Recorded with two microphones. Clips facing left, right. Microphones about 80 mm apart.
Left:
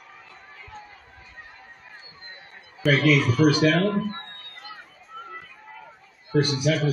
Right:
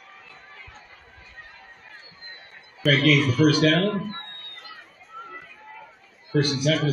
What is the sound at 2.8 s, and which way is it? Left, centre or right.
A man's voice, centre.